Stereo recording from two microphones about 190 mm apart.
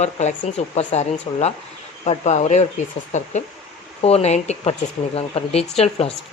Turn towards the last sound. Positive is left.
turn(degrees=30)  # may be behind; listen again after turning